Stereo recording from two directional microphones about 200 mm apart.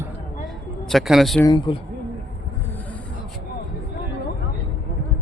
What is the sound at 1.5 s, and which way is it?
Speech, 25° left (ahead or behind).